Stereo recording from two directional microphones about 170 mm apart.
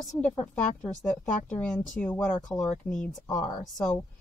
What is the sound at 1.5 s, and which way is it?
Speech, 5° left (ahead or behind).